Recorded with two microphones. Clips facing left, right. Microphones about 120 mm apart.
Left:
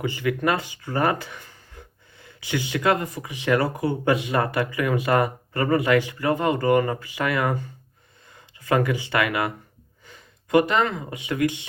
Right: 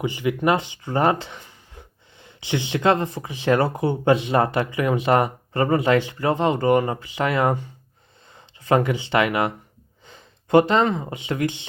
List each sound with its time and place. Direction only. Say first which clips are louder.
0.0 s speech: right 2 dB; 20° right (ahead or behind)